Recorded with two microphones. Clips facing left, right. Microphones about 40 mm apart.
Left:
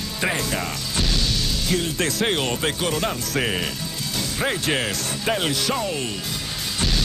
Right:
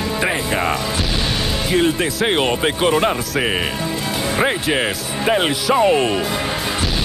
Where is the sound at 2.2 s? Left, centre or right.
Right.